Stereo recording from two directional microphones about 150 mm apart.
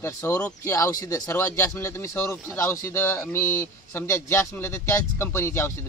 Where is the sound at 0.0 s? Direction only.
15° left (ahead or behind).